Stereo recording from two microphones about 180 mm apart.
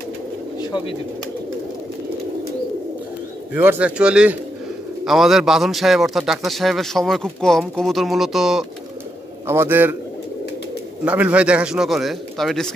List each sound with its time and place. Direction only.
0.6 s bird: 25° left (ahead or behind)
3.5 s a man's voice: 10° right (ahead or behind)
11.1 s a man's voice: 10° right (ahead or behind)